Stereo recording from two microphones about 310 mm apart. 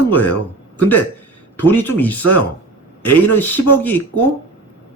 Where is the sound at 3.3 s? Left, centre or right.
Centre.